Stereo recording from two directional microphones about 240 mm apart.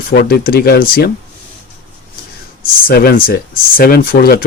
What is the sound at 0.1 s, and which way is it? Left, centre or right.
Speech, left.